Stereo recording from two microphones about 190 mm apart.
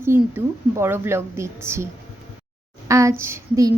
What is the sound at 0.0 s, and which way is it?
A woman's voice, 15° right (ahead or behind).